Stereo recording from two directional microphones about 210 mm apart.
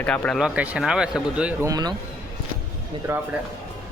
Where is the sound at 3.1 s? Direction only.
10° right (ahead or behind).